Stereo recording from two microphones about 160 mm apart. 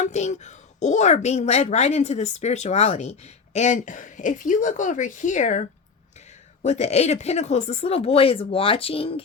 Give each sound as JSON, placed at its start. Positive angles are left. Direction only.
{"t": 0.0, "sound": "speech", "side_deg": 45}